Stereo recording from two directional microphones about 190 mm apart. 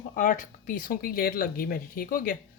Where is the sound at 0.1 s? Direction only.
40° left (ahead or behind).